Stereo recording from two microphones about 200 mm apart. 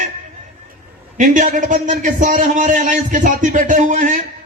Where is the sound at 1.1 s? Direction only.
40° right (ahead or behind).